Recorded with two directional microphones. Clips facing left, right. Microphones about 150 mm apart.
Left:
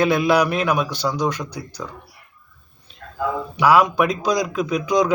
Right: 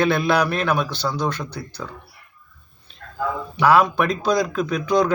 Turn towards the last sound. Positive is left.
turn(degrees=15)  # may be behind; listen again after turning